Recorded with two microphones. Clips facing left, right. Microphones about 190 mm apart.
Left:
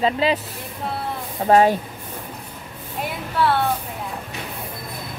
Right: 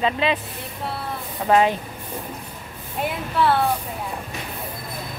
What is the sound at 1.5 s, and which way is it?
Speech, 40° left (ahead or behind).